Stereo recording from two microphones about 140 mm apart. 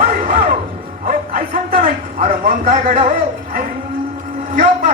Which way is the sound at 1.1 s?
90° right.